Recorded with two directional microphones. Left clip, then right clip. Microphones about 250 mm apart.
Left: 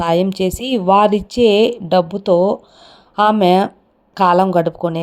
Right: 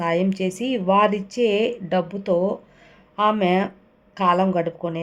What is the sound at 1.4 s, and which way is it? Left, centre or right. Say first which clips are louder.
Speech: left 8 dB; centre.